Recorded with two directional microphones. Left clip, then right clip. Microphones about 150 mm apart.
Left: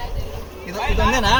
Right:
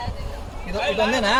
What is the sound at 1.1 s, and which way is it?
Speech, 30° right (ahead or behind).